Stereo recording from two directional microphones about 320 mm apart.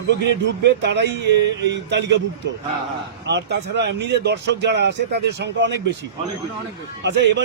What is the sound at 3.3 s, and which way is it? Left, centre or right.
Speech, right.